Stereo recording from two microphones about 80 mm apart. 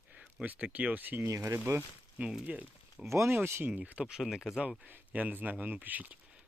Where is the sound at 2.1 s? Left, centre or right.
Centre.